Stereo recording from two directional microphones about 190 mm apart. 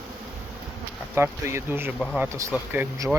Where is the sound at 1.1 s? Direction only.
15° right (ahead or behind).